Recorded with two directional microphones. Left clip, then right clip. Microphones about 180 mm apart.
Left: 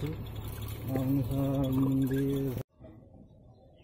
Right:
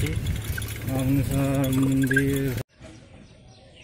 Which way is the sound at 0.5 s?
15° right (ahead or behind).